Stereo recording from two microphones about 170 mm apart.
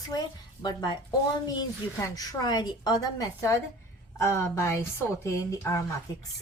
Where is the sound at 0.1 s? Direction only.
25° left (ahead or behind).